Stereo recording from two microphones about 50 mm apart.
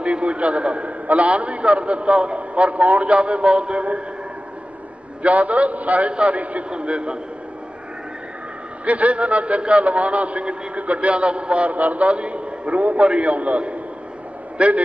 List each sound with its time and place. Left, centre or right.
0.0 s a man's voice: right
5.2 s a man's voice: right
8.8 s a man's voice: right